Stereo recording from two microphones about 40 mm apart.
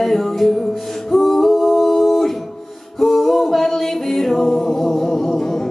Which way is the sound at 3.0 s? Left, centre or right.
Centre.